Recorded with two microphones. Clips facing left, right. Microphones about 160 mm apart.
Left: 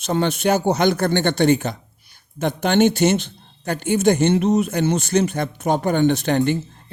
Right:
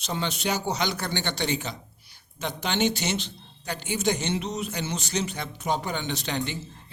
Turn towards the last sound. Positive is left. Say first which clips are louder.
# left 11 dB
turn(degrees=50)  # may be behind; listen again after turning